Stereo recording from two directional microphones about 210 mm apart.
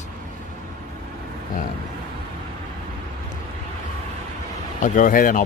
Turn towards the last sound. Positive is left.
turn(degrees=40)  # may be behind; listen again after turning